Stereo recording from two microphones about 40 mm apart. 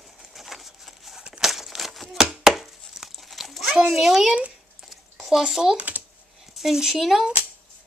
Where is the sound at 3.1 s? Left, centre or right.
Centre.